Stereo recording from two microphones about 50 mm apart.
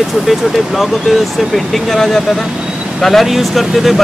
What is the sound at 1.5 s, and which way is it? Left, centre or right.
Speech, centre.